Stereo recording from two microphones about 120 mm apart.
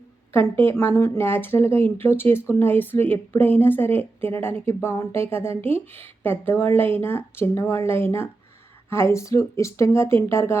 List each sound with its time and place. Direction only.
0.5 s a woman's voice: 15° left (ahead or behind)